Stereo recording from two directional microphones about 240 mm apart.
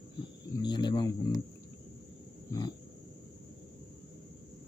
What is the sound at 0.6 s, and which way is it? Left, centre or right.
Speech, centre.